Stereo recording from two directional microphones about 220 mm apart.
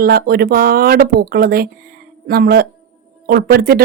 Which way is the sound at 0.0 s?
45° right (ahead or behind).